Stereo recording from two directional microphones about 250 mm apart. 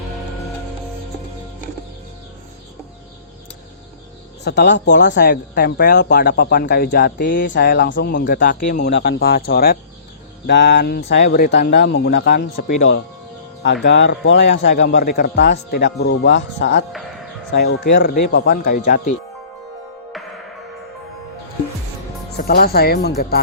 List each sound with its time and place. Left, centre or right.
4.4 s speech: left
13.8 s speech: left
22.4 s speech: left